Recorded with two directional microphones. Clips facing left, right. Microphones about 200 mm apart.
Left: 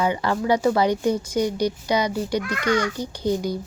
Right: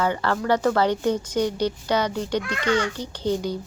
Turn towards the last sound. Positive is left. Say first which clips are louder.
# left 1 dB
turn(degrees=10)  # may be behind; listen again after turning